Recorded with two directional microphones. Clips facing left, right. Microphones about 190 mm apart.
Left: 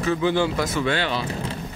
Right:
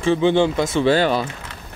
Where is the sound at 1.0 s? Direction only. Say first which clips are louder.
Right 7 dB; 45° right (ahead or behind).